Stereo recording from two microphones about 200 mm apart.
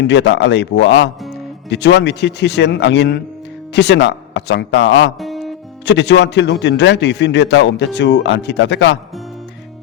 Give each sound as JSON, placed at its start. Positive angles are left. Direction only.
{"t": 0.0, "sound": "a man's voice", "side_deg": 60}
{"t": 5.2, "sound": "music", "side_deg": 0}
{"t": 5.8, "sound": "a man's voice", "side_deg": 60}